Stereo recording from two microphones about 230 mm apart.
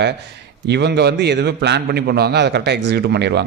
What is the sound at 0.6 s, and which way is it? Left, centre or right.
A man's voice, right.